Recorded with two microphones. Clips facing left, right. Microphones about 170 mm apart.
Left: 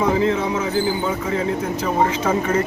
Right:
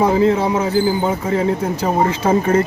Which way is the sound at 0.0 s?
35° right (ahead or behind).